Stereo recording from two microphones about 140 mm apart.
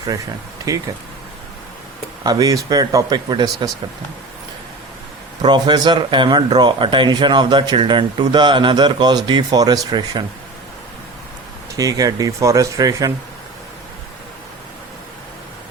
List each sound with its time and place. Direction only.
0.7 s speech: 25° right (ahead or behind)
2.2 s speech: 30° right (ahead or behind)
5.4 s speech: 30° right (ahead or behind)
11.8 s speech: 25° right (ahead or behind)